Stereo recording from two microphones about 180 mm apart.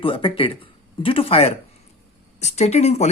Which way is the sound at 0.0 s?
30° left (ahead or behind).